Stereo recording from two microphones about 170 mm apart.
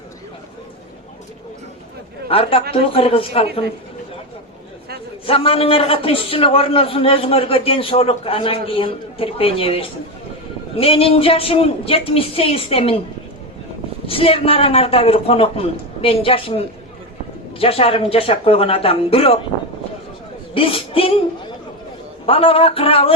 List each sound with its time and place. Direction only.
2.3 s a man's voice: 35° left (ahead or behind)
5.2 s a man's voice: 35° left (ahead or behind)
14.1 s a man's voice: 35° left (ahead or behind)
20.5 s a man's voice: 35° left (ahead or behind)